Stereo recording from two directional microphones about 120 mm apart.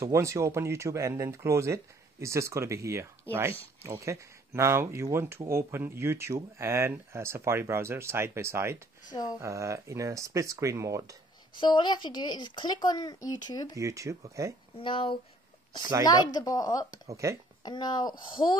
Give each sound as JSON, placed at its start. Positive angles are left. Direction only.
{"t": 0.0, "sound": "speech", "side_deg": -25}
{"t": 9.1, "sound": "speech", "side_deg": 35}
{"t": 9.4, "sound": "speech", "side_deg": -25}
{"t": 11.6, "sound": "speech", "side_deg": 40}
{"t": 13.7, "sound": "speech", "side_deg": -25}
{"t": 14.8, "sound": "speech", "side_deg": 45}
{"t": 16.0, "sound": "speech", "side_deg": 35}
{"t": 17.2, "sound": "speech", "side_deg": -25}
{"t": 17.6, "sound": "speech", "side_deg": 35}